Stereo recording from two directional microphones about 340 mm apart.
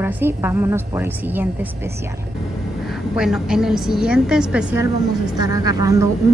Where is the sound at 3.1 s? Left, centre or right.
Centre.